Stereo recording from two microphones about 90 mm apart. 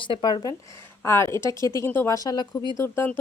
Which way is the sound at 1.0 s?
30° left (ahead or behind).